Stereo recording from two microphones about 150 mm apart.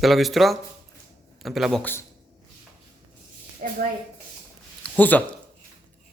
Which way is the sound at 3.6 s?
70° right (ahead or behind).